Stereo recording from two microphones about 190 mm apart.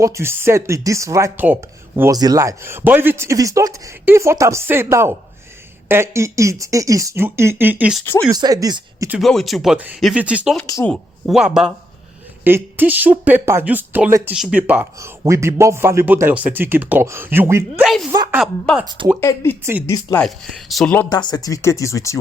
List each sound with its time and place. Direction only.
0.0 s speech: 15° right (ahead or behind)
8.0 s speech: 10° left (ahead or behind)
8.3 s speech: 20° right (ahead or behind)
9.0 s a woman's voice: centre (ahead or behind); by 18.3 s 20° right (ahead or behind)
18.7 s speech: 5° left (ahead or behind)
19.2 s speech: 15° left (ahead or behind)
20.2 s speech: centre (ahead or behind)
21.1 s speech: 20° left (ahead or behind)